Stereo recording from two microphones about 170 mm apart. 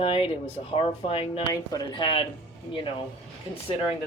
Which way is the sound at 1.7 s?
30° left (ahead or behind).